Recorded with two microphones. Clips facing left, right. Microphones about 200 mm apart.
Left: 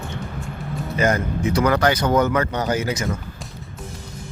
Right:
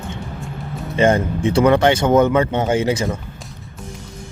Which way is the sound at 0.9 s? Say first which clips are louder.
Right 5 dB; 30° right (ahead or behind).